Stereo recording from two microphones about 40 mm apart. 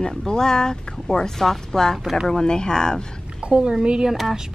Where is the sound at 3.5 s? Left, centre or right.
Right.